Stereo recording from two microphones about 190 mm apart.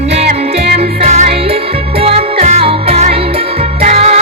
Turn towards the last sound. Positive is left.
turn(degrees=-35)  # may be behind; listen again after turning